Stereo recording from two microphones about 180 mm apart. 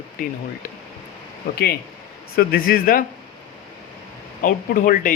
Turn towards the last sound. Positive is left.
turn(degrees=50)  # may be behind; listen again after turning